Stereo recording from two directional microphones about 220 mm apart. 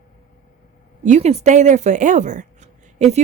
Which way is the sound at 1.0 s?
30° right (ahead or behind).